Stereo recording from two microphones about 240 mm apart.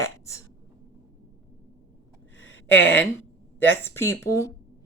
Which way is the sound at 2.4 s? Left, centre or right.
Left.